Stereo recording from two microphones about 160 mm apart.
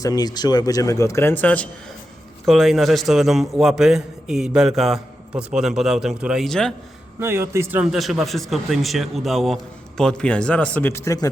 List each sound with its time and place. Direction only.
0.0 s a man's voice: 25° left (ahead or behind); by 6.7 s 5° left (ahead or behind)
7.2 s a man's voice: 15° right (ahead or behind); by 11.3 s 20° left (ahead or behind)